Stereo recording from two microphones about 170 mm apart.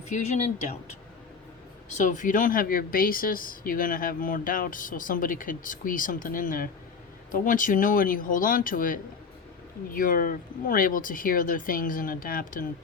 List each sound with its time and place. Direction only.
0.1 s speech: 45° left (ahead or behind)
2.0 s speech: 50° left (ahead or behind)